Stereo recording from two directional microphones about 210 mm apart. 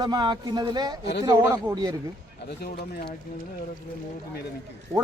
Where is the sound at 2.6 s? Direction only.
45° left (ahead or behind).